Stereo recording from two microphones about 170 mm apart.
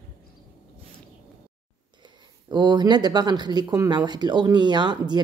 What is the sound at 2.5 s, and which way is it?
Speech, 25° right (ahead or behind).